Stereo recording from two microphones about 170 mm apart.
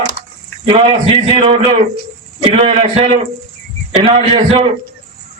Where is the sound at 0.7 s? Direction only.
35° right (ahead or behind).